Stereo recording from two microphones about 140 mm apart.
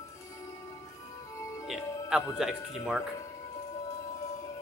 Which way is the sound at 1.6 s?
Centre (ahead or behind).